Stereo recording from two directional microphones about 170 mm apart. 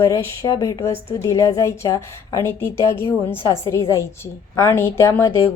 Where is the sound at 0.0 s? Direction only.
15° left (ahead or behind).